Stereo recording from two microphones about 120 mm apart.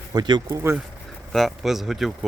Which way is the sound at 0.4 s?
20° right (ahead or behind).